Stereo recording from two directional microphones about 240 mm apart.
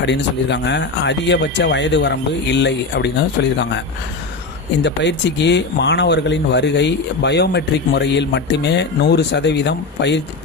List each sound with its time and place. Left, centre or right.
0.0 s speech: left
4.8 s speech: left